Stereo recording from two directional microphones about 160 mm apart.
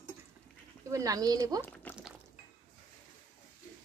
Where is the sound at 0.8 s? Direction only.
20° right (ahead or behind).